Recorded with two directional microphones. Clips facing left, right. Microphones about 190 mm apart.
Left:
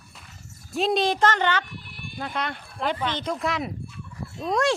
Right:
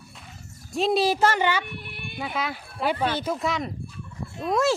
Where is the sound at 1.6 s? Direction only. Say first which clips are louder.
Right 3 dB; 65° right (ahead or behind).